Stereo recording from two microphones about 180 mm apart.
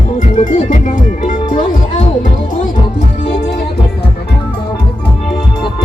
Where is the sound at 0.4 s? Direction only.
45° left (ahead or behind).